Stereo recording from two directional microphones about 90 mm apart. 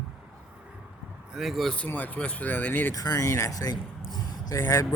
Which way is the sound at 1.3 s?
5° right (ahead or behind).